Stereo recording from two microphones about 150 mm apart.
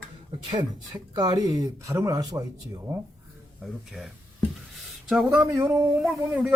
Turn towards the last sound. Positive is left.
turn(degrees=-5)  # may be behind; listen again after turning